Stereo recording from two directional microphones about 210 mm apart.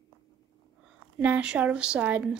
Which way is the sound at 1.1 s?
5° right (ahead or behind).